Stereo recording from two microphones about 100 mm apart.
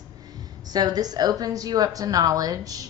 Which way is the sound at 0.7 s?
40° right (ahead or behind).